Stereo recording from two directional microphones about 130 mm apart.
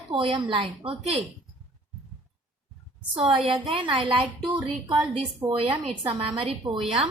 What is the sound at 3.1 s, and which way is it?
A woman's voice, 45° right (ahead or behind).